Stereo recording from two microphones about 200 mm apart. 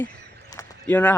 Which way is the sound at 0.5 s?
10° left (ahead or behind).